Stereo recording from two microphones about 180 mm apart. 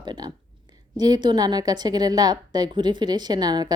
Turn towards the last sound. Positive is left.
turn(degrees=-25)  # may be behind; listen again after turning